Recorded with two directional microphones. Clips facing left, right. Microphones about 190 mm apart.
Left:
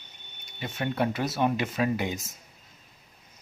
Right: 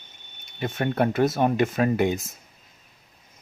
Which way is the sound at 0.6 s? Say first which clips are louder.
Right 5 dB; 50° right (ahead or behind).